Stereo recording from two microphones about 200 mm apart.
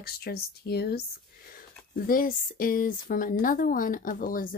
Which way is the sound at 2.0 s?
45° left (ahead or behind).